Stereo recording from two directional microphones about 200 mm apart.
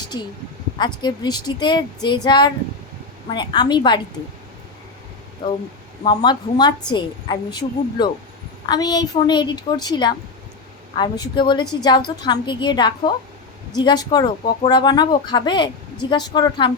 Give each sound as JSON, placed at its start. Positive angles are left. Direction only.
{"t": 0.1, "sound": "a woman's voice", "side_deg": 20}
{"t": 5.4, "sound": "a woman's voice", "side_deg": 25}